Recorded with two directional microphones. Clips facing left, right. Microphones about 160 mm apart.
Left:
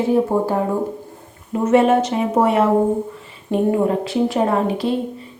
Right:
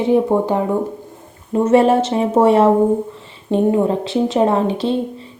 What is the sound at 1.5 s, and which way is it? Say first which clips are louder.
A woman's voice: right 2 dB; 30° right (ahead or behind).